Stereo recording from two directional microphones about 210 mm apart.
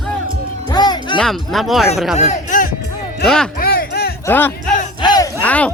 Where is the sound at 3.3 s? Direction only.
5° left (ahead or behind).